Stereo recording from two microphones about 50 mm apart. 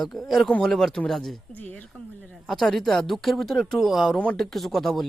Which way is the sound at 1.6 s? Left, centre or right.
Left.